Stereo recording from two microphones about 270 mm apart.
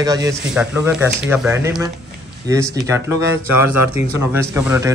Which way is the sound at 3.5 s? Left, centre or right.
Left.